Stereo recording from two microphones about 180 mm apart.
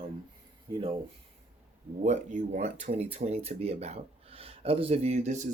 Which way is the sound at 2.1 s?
40° right (ahead or behind).